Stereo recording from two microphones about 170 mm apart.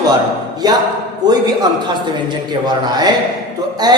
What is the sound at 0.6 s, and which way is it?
A woman's voice, 25° right (ahead or behind).